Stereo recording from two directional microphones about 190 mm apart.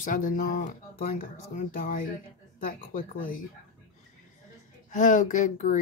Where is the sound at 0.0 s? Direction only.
45° left (ahead or behind).